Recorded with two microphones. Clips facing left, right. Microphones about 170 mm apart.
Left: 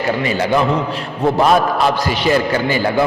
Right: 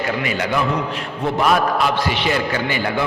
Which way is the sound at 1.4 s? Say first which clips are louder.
Left 2 dB; 35° left (ahead or behind).